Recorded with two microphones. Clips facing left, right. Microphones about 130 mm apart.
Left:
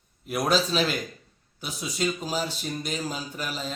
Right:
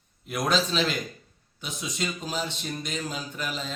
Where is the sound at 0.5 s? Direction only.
5° left (ahead or behind).